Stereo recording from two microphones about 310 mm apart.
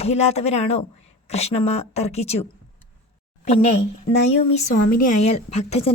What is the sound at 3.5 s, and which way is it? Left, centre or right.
Speech, left.